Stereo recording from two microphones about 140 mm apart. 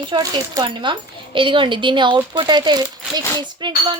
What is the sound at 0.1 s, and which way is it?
A woman's voice, 30° right (ahead or behind).